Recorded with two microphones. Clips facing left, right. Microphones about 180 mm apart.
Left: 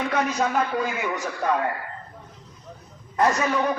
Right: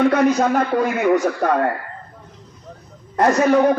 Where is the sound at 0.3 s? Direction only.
50° right (ahead or behind).